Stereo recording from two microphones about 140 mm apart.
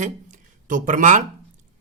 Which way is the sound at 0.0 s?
65° right (ahead or behind).